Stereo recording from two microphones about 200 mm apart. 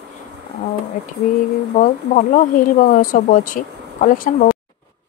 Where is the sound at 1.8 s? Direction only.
40° left (ahead or behind).